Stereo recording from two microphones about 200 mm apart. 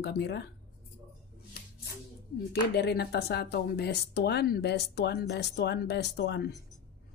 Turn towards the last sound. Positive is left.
turn(degrees=55)  # may be behind; listen again after turning